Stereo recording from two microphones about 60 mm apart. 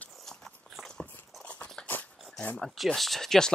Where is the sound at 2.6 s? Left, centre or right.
Centre.